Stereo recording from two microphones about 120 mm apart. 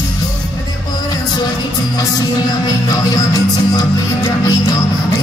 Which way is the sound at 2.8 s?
30° left (ahead or behind).